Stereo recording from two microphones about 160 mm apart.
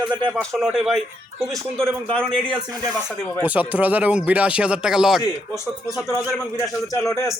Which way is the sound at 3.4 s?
10° right (ahead or behind).